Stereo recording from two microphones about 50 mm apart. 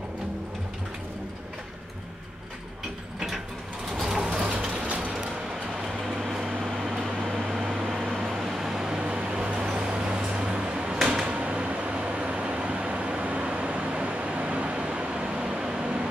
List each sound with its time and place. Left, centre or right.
3.9 s vehicle: centre
4.8 s music: right
5.9 s air conditioning: centre
7.6 s vehicle: centre